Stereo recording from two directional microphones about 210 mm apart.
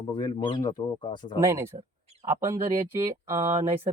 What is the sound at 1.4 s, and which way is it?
Speech, 15° right (ahead or behind).